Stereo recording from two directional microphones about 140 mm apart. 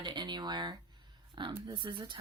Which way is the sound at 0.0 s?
30° right (ahead or behind).